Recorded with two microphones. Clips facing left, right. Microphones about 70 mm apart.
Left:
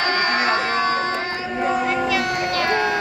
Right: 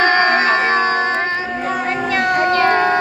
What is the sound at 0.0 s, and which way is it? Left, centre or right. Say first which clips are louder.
Music: right 6 dB; right.